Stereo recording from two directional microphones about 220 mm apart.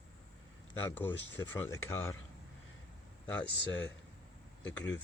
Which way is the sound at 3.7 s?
55° left (ahead or behind).